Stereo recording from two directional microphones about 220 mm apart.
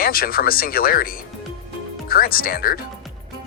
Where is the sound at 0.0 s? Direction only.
45° left (ahead or behind).